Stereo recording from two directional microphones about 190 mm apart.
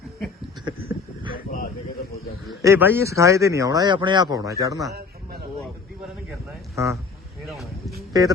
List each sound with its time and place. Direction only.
0.6 s a sound: 25° right (ahead or behind)
2.6 s speech: 15° right (ahead or behind)
6.7 s speech: 15° right (ahead or behind)
7.4 s vehicle: centre (ahead or behind)
8.1 s music: 20° right (ahead or behind)